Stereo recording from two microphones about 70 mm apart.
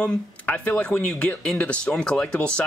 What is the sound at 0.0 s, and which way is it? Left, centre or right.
Speech, centre.